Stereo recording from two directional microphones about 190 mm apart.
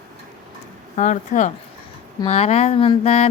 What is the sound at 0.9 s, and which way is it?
Speech, 40° left (ahead or behind).